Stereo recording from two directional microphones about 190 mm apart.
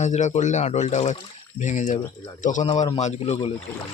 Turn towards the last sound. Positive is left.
turn(degrees=30)  # may be behind; listen again after turning